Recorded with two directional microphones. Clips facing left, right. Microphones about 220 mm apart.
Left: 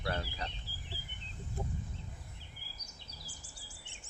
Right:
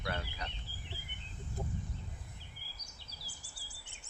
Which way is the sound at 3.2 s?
35° right (ahead or behind).